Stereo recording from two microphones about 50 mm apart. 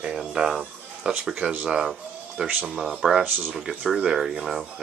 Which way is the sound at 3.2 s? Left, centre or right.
Right.